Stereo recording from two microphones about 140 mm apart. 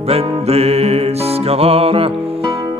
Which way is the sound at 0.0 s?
45° right (ahead or behind).